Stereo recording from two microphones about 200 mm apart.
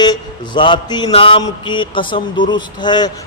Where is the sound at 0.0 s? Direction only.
20° left (ahead or behind).